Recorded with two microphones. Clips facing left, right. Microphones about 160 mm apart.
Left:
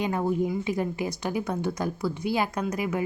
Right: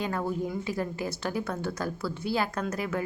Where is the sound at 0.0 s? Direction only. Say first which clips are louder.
Left 4 dB; 20° left (ahead or behind).